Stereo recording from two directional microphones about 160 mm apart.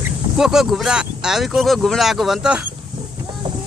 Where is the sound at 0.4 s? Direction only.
Centre (ahead or behind).